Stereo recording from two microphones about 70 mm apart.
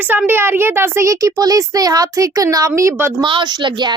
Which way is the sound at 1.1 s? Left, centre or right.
Right.